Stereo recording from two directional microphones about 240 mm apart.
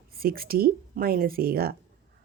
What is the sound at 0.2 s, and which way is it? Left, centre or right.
A woman's voice, right.